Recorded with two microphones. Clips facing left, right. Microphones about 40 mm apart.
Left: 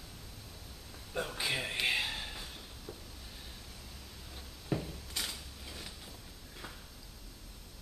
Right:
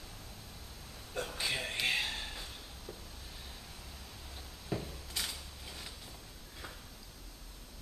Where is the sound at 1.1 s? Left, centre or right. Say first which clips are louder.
Left 2 dB; centre.